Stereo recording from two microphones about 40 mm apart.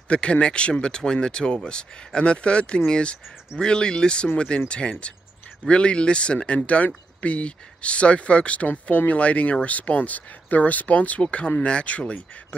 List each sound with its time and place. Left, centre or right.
0.1 s speech: left